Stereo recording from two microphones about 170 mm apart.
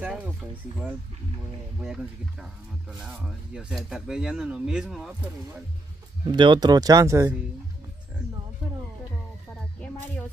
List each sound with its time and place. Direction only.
0.0 s speech: 10° right (ahead or behind)
1.9 s speech: 5° right (ahead or behind)
6.2 s speech: 25° right (ahead or behind)